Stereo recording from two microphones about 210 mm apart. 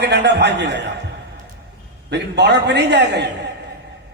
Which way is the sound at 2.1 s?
55° right (ahead or behind).